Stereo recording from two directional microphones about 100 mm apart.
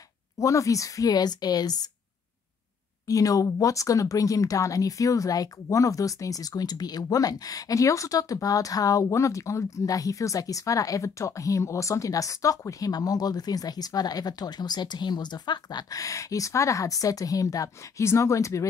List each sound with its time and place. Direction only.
0.4 s speech: 35° left (ahead or behind)
3.1 s speech: 35° left (ahead or behind)